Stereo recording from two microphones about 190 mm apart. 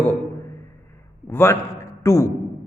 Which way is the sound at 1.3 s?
15° left (ahead or behind).